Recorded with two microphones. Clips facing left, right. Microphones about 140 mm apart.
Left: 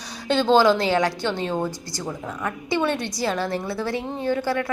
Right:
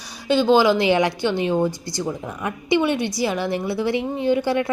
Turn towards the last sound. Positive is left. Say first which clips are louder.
# right 4 dB
turn(degrees=-20)  # may be behind; listen again after turning